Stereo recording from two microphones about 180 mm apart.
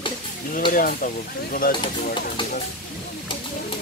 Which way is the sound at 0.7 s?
50° left (ahead or behind).